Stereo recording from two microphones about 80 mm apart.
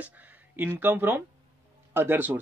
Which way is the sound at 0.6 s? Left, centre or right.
Right.